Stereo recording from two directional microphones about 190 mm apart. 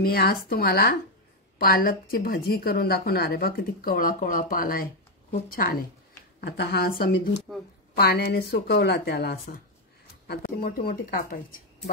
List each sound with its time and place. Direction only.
0.0 s a woman's voice: 55° left (ahead or behind)